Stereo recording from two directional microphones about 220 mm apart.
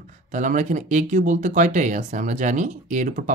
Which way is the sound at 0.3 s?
35° right (ahead or behind).